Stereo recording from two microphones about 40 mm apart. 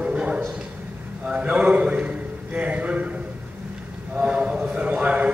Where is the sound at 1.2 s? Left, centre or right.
Right.